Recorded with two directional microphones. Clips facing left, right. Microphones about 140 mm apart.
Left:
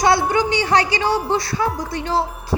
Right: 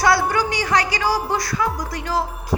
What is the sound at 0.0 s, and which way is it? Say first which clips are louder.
A woman's voice: left 2 dB; 20° left (ahead or behind).